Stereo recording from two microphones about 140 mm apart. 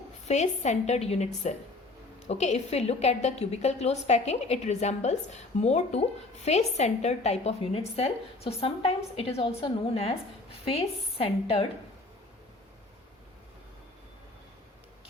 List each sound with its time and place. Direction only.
0.3 s a woman's voice: 55° left (ahead or behind)